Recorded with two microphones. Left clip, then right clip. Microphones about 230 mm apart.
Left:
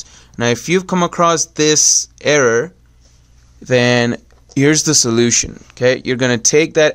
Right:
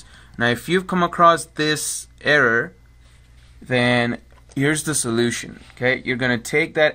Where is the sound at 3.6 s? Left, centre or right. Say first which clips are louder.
Left 6 dB; left.